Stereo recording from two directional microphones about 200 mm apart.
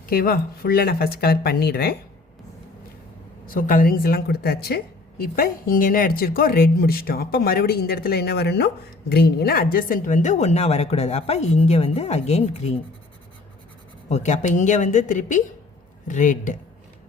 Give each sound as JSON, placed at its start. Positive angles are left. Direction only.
{"t": 0.0, "sound": "a woman's voice", "side_deg": 50}
{"t": 3.5, "sound": "a woman's voice", "side_deg": 45}
{"t": 14.1, "sound": "speech", "side_deg": 35}